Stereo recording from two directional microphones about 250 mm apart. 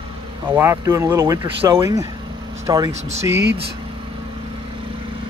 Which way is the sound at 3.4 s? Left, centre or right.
Right.